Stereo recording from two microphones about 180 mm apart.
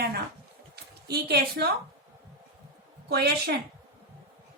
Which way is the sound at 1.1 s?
60° right (ahead or behind).